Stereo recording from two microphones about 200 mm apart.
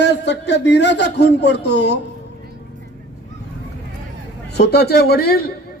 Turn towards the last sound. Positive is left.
turn(degrees=50)  # may be behind; listen again after turning